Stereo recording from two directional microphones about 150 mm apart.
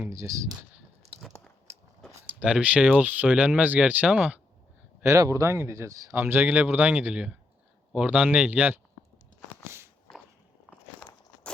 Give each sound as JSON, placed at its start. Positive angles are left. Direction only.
{"t": 0.0, "sound": "speech", "side_deg": -20}
{"t": 2.4, "sound": "speech", "side_deg": -10}
{"t": 5.0, "sound": "speech", "side_deg": -20}
{"t": 9.6, "sound": "a sound", "side_deg": -15}
{"t": 10.7, "sound": "biting", "side_deg": 5}